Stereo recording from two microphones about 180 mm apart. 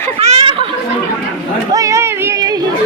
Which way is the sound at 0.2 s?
35° right (ahead or behind).